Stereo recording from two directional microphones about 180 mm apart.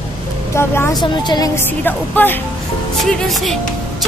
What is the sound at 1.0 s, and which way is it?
Speech, 25° left (ahead or behind).